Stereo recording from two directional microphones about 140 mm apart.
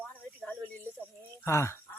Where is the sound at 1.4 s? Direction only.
20° left (ahead or behind).